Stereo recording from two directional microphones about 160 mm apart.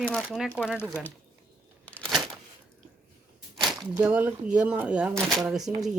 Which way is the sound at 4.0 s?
10° right (ahead or behind).